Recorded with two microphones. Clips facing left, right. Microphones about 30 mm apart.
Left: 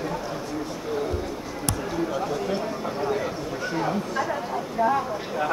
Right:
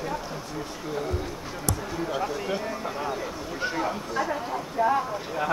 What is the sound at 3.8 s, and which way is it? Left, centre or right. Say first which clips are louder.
Speech: left 3 dB; centre.